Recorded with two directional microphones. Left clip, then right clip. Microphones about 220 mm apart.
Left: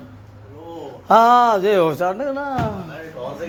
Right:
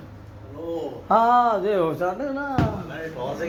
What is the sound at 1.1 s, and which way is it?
Speech, 55° left (ahead or behind).